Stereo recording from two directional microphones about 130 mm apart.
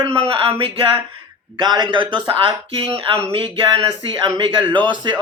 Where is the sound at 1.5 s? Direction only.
35° right (ahead or behind).